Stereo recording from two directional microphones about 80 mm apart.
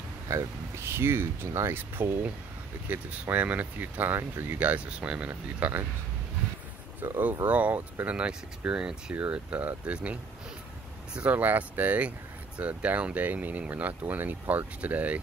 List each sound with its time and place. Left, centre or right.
0.3 s speech: right
4.6 s speech: centre
5.3 s speech: right
7.0 s speech: right
11.1 s speech: centre